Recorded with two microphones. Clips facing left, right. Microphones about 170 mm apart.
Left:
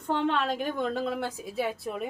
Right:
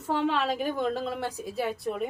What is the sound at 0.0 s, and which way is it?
A woman's voice, 5° right (ahead or behind).